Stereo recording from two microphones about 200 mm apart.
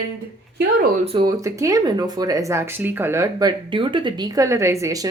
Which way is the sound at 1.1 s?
20° right (ahead or behind).